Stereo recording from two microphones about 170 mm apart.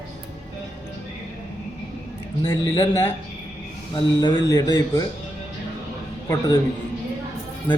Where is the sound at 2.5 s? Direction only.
20° left (ahead or behind).